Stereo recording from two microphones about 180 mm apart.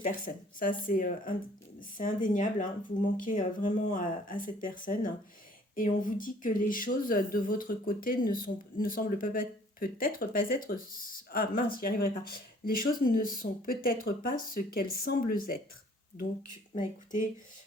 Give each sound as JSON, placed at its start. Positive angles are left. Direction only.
{"t": 0.0, "sound": "speech", "side_deg": 50}
{"t": 16.7, "sound": "speech", "side_deg": 45}